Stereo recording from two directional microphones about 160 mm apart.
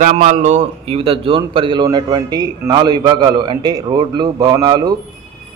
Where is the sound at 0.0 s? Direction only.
55° right (ahead or behind).